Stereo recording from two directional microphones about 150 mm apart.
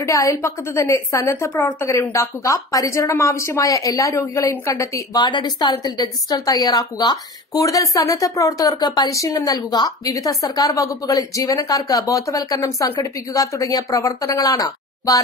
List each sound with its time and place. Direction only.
0.0 s a woman's voice: 20° left (ahead or behind)